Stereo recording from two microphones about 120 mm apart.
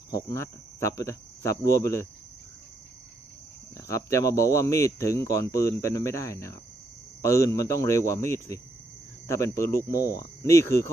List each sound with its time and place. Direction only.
0.1 s speech: 30° left (ahead or behind)
3.8 s speech: 25° left (ahead or behind)